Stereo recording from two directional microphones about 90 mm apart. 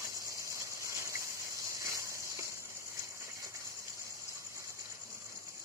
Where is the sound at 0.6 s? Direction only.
35° right (ahead or behind).